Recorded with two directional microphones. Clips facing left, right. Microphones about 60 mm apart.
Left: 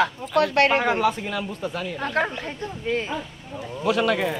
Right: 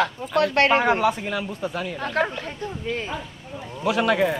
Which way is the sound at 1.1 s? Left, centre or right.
Centre.